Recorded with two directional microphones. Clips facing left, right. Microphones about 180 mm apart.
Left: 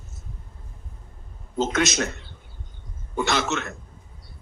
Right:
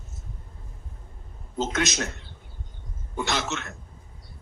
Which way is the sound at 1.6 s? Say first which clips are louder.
Left 4 dB; 70° left (ahead or behind).